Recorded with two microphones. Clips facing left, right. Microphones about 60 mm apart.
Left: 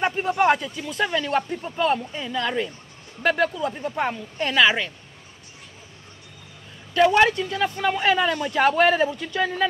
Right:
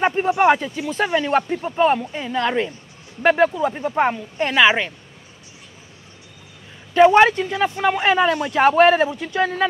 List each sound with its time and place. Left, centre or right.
0.0 s speech: centre
6.9 s speech: right